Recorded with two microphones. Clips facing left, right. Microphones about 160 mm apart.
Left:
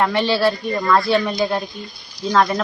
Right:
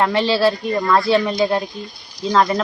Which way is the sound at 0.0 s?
25° right (ahead or behind).